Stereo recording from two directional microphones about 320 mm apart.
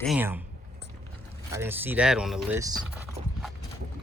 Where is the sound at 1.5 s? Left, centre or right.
Centre.